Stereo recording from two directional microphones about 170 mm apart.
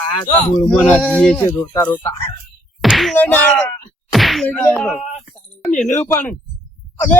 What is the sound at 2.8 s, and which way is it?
Whack, centre (ahead or behind).